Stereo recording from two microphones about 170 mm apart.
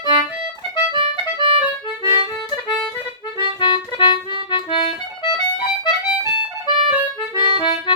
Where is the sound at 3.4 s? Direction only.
25° left (ahead or behind).